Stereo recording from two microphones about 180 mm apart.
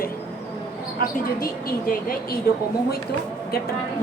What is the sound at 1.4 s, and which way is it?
A woman's voice, 55° left (ahead or behind).